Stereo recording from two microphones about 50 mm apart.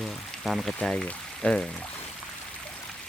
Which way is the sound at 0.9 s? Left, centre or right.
Left.